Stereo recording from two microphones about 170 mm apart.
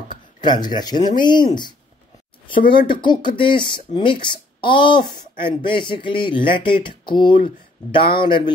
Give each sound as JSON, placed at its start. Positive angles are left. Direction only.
{"t": 0.4, "sound": "speech", "side_deg": 25}